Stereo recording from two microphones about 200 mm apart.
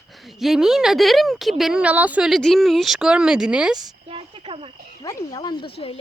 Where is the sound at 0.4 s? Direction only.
Centre (ahead or behind).